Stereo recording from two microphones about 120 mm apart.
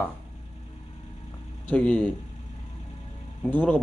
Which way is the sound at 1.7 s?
10° left (ahead or behind).